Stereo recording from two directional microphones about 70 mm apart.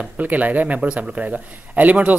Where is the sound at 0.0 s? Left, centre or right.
Right.